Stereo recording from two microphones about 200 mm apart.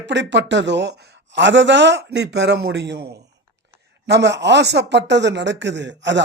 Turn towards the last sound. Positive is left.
turn(degrees=-60)  # may be behind; listen again after turning